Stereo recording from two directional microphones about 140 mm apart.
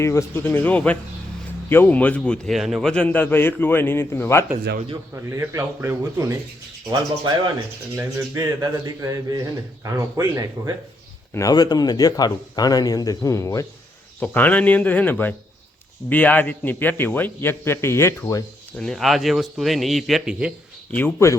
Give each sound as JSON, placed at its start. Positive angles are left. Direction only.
{"t": 0.0, "sound": "a man's voice", "side_deg": 20}
{"t": 5.1, "sound": "speech", "side_deg": -20}
{"t": 7.9, "sound": "speech", "side_deg": -20}
{"t": 11.3, "sound": "a man's voice", "side_deg": 25}
{"t": 14.2, "sound": "a man's voice", "side_deg": 10}
{"t": 18.8, "sound": "a man's voice", "side_deg": 0}
{"t": 20.9, "sound": "a man's voice", "side_deg": 15}